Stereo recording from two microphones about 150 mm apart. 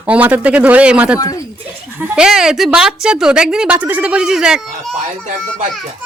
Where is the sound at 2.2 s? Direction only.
5° right (ahead or behind).